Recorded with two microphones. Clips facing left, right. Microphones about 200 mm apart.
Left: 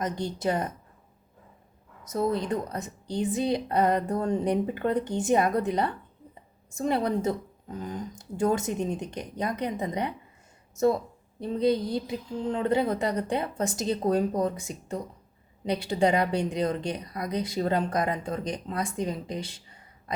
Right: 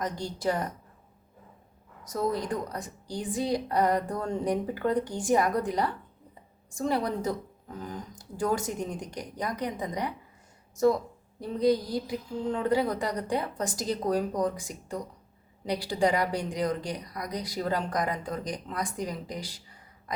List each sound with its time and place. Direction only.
0.0 s a woman's voice: 20° left (ahead or behind)
2.0 s a woman's voice: 20° left (ahead or behind)
11.3 s a woman's voice: 25° left (ahead or behind)